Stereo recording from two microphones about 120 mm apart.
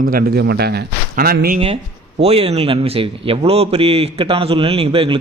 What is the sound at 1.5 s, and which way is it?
A man's voice, 50° right (ahead or behind).